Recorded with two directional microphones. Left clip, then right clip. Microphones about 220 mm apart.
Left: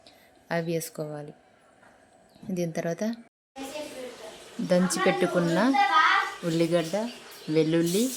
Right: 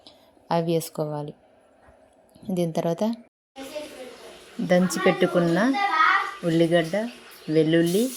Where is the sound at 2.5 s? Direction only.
20° right (ahead or behind).